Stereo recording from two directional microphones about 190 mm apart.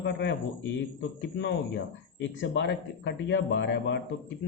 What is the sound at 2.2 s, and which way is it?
A man's voice, 70° left (ahead or behind).